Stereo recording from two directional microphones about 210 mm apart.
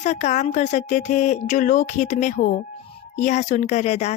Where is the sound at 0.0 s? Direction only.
35° left (ahead or behind).